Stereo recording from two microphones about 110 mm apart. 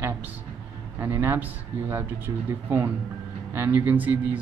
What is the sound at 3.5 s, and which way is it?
Speech, 20° right (ahead or behind).